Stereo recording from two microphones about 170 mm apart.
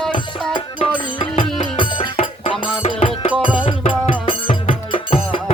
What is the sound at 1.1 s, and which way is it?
Music, 30° left (ahead or behind).